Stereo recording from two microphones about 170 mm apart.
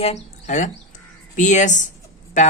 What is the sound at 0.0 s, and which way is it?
Speech, 40° left (ahead or behind).